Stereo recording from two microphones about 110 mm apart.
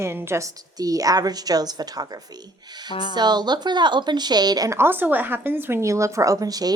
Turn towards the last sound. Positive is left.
turn(degrees=-35)  # may be behind; listen again after turning